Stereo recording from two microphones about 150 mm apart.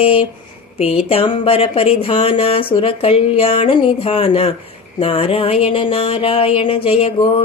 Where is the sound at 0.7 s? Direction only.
40° left (ahead or behind).